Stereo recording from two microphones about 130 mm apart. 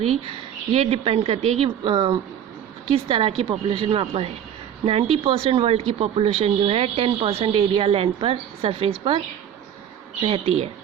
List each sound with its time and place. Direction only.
0.7 s speech: 50° right (ahead or behind)
10.2 s speech: 45° right (ahead or behind)